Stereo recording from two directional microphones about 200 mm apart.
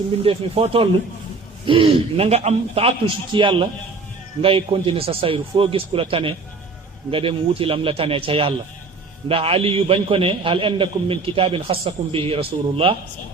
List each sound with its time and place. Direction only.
0.2 s a man's voice: 30° right (ahead or behind)